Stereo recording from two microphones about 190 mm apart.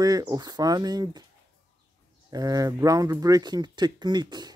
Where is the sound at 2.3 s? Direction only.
20° right (ahead or behind).